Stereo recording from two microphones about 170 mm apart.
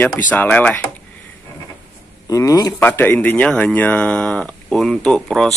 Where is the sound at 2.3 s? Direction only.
20° left (ahead or behind).